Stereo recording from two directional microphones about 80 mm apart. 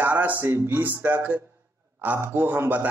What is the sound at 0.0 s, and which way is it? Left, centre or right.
Speech, right.